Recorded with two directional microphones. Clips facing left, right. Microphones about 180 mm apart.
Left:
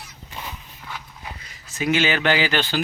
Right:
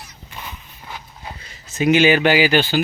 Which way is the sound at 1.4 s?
20° right (ahead or behind).